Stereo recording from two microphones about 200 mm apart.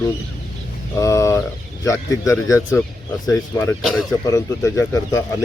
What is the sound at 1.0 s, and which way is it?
Speech, 15° left (ahead or behind).